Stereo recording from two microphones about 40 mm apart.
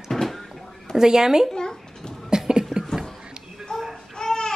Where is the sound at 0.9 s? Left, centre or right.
Centre.